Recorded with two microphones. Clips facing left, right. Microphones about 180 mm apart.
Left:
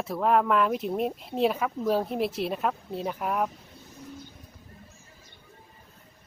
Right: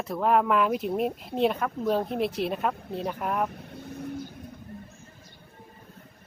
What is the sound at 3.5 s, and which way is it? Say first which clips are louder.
Vehicle: right 9 dB; 60° right (ahead or behind).